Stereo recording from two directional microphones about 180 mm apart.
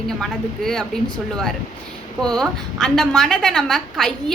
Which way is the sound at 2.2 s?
5° left (ahead or behind).